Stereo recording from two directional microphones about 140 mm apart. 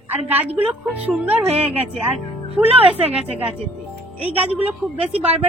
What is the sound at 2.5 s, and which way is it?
Speech, 45° right (ahead or behind).